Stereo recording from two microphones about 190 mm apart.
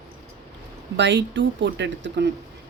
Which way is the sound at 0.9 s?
70° right (ahead or behind).